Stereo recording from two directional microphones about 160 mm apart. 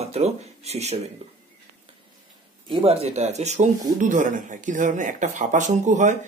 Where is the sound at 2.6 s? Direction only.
40° right (ahead or behind).